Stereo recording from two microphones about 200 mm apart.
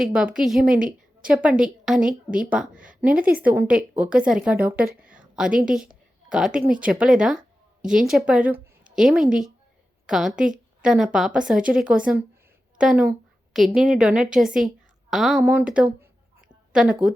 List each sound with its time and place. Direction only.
0.0 s speech: 5° right (ahead or behind)
0.7 s a woman's voice: 45° right (ahead or behind)
1.3 s speech: 5° right (ahead or behind)
2.0 s a woman's voice: 40° right (ahead or behind)
2.5 s a woman's voice: 5° right (ahead or behind)
4.9 s a sound: 5° right (ahead or behind)
6.2 s speech: 5° right (ahead or behind)
10.3 s a woman's voice: 40° right (ahead or behind)
10.8 s a woman's voice: centre (ahead or behind)